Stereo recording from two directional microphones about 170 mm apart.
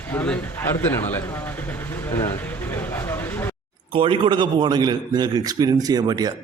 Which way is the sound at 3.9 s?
30° right (ahead or behind).